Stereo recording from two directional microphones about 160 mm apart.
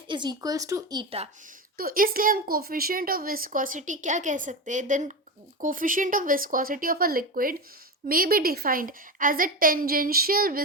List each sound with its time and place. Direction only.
0.1 s speech: 25° right (ahead or behind)
1.8 s a woman's voice: 65° right (ahead or behind)